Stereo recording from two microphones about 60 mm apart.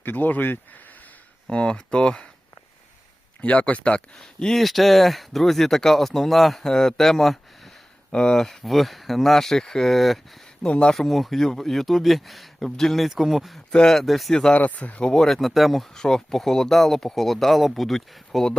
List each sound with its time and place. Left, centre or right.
0.0 s speech: left
1.5 s speech: centre
3.4 s speech: left
4.2 s speech: centre
8.1 s speech: centre
10.6 s speech: centre
10.9 s speech: centre
13.7 s speech: centre
14.3 s speech: centre
14.6 s speech: left
15.1 s speech: centre